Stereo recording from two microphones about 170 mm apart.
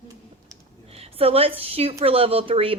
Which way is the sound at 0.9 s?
35° right (ahead or behind).